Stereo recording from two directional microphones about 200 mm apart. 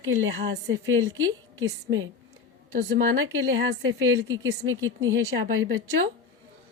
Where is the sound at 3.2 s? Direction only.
75° right (ahead or behind).